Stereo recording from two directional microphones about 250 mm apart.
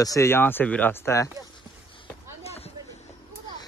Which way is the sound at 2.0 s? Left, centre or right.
Left.